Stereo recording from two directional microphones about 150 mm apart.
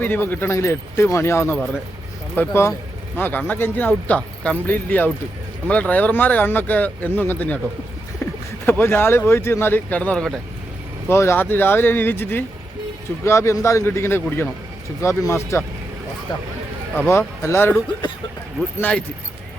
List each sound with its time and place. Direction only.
0.0 s speech: 15° left (ahead or behind)
11.1 s speech: 15° left (ahead or behind)
17.1 s speech: 15° left (ahead or behind)